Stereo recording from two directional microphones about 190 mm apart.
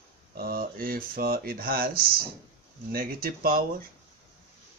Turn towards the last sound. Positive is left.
turn(degrees=-50)  # may be behind; listen again after turning